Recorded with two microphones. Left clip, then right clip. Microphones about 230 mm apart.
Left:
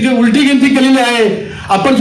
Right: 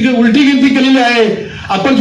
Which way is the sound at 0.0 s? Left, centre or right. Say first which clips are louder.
Right 1 dB; left.